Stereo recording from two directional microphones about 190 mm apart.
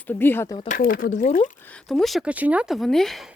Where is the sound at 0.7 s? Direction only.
45° left (ahead or behind).